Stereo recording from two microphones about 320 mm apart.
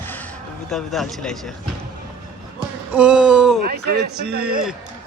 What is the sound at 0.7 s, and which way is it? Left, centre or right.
Speech, centre.